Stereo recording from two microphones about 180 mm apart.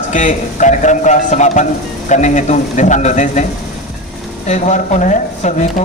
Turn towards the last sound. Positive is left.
turn(degrees=40)  # may be behind; listen again after turning